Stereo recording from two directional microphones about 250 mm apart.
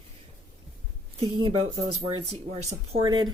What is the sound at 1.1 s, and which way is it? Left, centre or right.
Speech, right.